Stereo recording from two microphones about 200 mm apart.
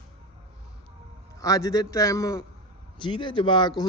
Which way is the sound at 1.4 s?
15° left (ahead or behind).